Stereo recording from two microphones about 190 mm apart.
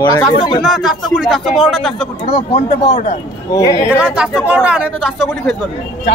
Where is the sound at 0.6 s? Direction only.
Centre (ahead or behind).